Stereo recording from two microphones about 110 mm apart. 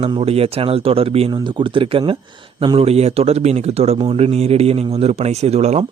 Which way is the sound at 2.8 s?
70° right (ahead or behind).